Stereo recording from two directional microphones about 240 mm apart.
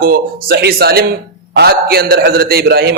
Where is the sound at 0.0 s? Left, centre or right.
Right.